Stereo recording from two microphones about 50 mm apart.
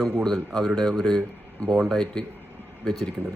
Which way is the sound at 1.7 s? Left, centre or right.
Centre.